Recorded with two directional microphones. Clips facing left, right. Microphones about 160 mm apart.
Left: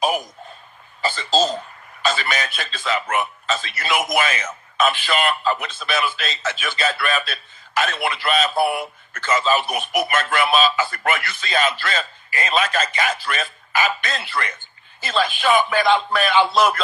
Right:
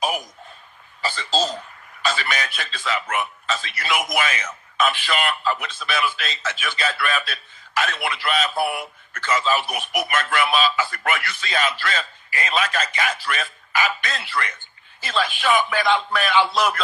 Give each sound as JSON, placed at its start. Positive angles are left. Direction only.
{"t": 1.1, "sound": "a man's voice", "side_deg": 30}